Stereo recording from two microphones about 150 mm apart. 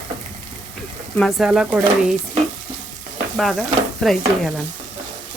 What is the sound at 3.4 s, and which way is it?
Speech, centre (ahead or behind).